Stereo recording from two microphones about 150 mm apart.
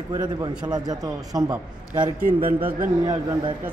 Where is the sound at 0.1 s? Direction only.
25° right (ahead or behind).